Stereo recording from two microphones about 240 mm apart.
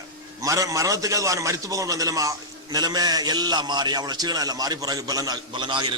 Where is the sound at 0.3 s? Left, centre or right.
Centre.